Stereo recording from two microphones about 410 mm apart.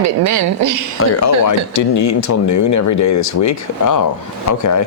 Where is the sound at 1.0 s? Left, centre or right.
Left.